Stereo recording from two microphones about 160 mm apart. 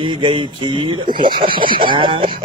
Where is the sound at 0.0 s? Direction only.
30° right (ahead or behind).